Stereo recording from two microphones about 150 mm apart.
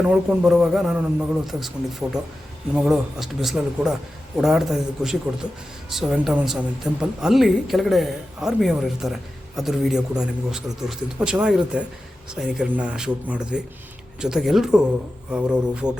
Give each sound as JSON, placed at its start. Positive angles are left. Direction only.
{"t": 0.1, "sound": "a man's voice", "side_deg": -5}